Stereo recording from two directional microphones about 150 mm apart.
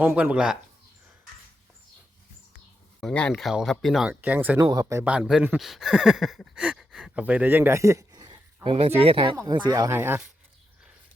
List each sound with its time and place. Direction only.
0.0 s speech: 10° right (ahead or behind)
3.0 s speech: 5° left (ahead or behind); by 4.6 s 10° right (ahead or behind)
4.6 s speech: 25° right (ahead or behind)
5.0 s speech: 5° right (ahead or behind)